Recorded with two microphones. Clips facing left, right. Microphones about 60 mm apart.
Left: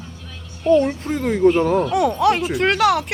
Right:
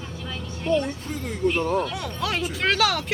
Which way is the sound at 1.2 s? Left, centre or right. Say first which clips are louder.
Left 11 dB; left.